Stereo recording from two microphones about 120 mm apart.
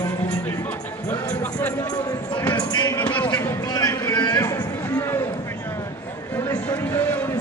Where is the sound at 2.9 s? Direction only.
10° left (ahead or behind).